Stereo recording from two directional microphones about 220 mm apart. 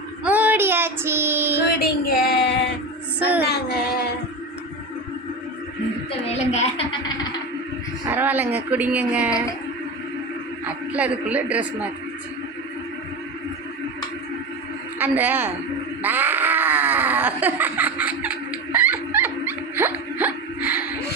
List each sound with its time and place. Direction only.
0.3 s child singing: 5° right (ahead or behind)
1.6 s child singing: 45° left (ahead or behind)
3.2 s child singing: 5° right (ahead or behind)
6.1 s a sound: 30° left (ahead or behind)
8.0 s speech: 10° right (ahead or behind)
10.9 s speech: 5° right (ahead or behind)
14.9 s a man's voice: 10° right (ahead or behind)
16.0 s a sound: 10° right (ahead or behind)
19.7 s whimper: 10° right (ahead or behind)